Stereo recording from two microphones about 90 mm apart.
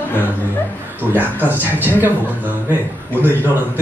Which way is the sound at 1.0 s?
20° right (ahead or behind).